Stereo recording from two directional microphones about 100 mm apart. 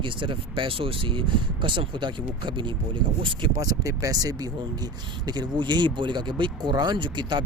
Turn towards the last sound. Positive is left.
turn(degrees=-50)  # may be behind; listen again after turning